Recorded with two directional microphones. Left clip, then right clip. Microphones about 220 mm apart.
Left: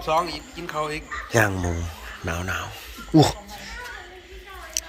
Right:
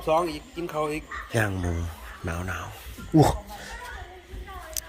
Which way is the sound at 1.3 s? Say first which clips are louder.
Left 6 dB; 10° right (ahead or behind).